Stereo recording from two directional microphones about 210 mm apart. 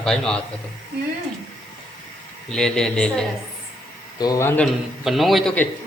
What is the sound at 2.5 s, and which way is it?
Speech, 5° left (ahead or behind).